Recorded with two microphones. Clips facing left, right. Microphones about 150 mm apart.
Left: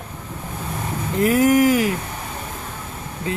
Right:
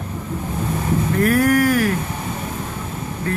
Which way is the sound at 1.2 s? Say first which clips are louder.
Left 2 dB; 20° left (ahead or behind).